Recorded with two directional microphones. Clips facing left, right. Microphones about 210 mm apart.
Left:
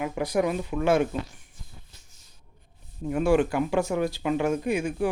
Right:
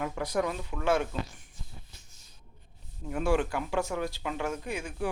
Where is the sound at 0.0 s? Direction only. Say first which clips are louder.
Left 5 dB; 10° left (ahead or behind).